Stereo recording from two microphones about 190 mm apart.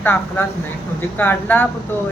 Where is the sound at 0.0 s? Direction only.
10° left (ahead or behind).